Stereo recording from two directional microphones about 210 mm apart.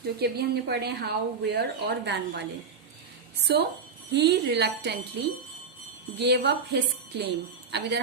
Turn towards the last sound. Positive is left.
turn(degrees=-55)  # may be behind; listen again after turning